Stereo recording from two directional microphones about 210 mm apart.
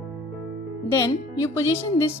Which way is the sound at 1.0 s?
15° left (ahead or behind).